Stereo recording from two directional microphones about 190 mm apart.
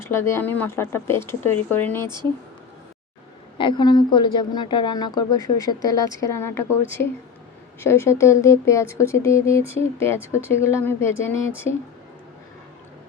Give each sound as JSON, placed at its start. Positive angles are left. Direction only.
{"t": 0.0, "sound": "speech", "side_deg": 15}
{"t": 3.6, "sound": "a woman's voice", "side_deg": 25}